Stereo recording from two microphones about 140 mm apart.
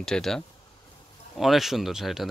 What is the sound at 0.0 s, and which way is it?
Speech, 5° left (ahead or behind).